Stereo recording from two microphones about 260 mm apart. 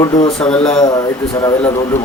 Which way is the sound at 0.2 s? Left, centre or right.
Left.